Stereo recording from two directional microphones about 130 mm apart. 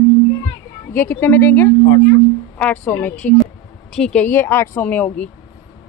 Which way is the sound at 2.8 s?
15° left (ahead or behind).